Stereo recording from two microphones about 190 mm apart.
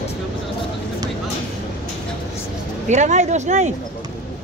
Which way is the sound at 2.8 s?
40° right (ahead or behind).